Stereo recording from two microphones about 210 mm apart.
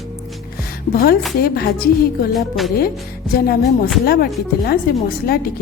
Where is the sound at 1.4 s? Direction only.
45° left (ahead or behind).